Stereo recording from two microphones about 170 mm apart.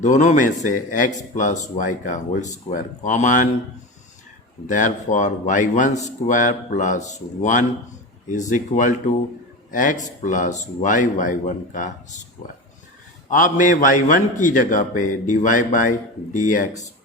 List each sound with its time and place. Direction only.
0.0 s a man's voice: 45° left (ahead or behind)
4.7 s a man's voice: 45° left (ahead or behind)
13.3 s a man's voice: 50° left (ahead or behind)